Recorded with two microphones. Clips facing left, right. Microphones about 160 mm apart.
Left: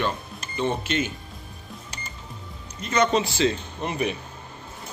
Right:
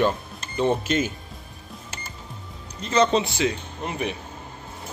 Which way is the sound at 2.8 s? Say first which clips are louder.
Right 2 dB; 30° right (ahead or behind).